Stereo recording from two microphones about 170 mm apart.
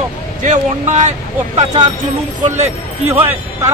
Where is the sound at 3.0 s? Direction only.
10° right (ahead or behind).